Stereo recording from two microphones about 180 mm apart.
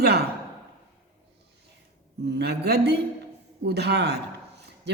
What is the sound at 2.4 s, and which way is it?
A man's voice, 65° right (ahead or behind).